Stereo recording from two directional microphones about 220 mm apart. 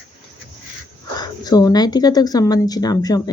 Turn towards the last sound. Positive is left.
turn(degrees=15)  # may be behind; listen again after turning